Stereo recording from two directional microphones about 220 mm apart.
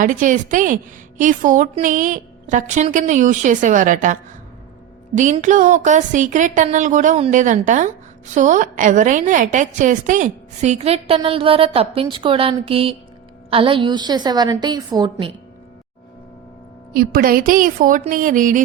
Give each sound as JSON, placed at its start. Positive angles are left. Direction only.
{"t": 0.0, "sound": "a woman's voice", "side_deg": -35}
{"t": 16.9, "sound": "a woman's voice", "side_deg": -40}